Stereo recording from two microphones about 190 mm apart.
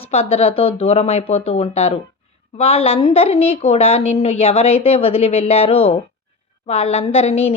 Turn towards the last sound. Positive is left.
turn(degrees=35)  # may be behind; listen again after turning